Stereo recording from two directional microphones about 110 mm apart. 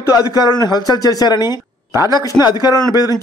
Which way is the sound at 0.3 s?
40° left (ahead or behind).